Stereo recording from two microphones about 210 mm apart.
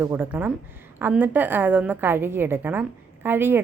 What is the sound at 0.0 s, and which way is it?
A woman's voice, 10° right (ahead or behind).